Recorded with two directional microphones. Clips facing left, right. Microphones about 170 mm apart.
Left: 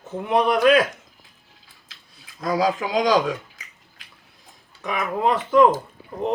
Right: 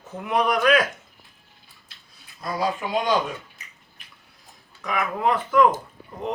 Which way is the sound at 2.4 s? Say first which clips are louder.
Left 4 dB; 90° left.